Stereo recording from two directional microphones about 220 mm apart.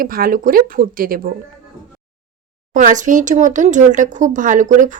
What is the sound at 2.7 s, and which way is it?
A woman's voice, 35° right (ahead or behind).